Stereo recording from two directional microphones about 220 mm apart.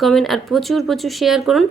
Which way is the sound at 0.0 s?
Centre (ahead or behind).